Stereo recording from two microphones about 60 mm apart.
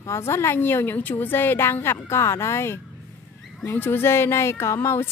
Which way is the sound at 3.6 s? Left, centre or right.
Left.